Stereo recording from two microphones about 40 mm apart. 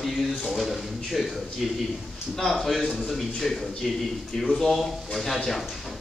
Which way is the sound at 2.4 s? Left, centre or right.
Centre.